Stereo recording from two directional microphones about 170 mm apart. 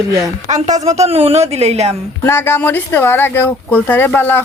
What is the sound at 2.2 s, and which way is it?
Speech, 15° left (ahead or behind).